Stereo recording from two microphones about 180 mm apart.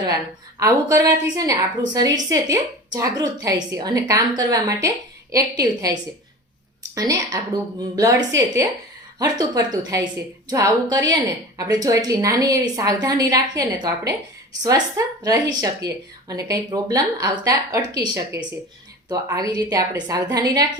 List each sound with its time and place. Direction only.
0.6 s a woman's voice: 20° right (ahead or behind)